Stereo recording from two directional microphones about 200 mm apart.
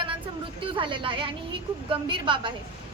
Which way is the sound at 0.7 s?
25° right (ahead or behind).